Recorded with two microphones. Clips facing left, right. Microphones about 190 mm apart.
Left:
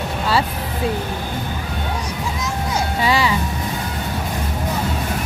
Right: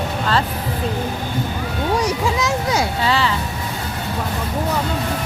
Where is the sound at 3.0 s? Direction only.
10° left (ahead or behind).